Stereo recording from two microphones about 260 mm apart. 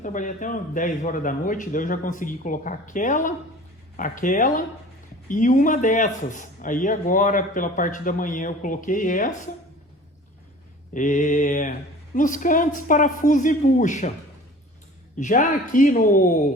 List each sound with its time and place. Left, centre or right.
0.0 s speech: left
10.9 s speech: left
15.2 s speech: left